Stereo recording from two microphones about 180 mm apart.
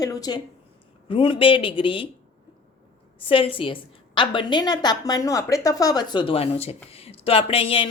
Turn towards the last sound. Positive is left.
turn(degrees=30)  # may be behind; listen again after turning